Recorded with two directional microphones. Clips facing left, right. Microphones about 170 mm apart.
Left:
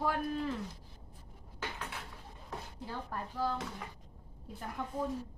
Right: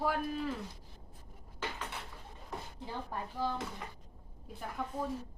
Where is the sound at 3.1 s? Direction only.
15° right (ahead or behind).